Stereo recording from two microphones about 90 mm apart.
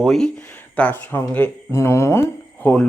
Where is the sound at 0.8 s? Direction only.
20° left (ahead or behind).